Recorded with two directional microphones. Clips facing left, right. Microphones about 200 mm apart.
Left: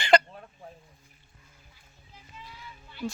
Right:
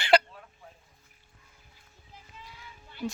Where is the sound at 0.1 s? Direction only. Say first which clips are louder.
Left 1 dB; 5° right (ahead or behind).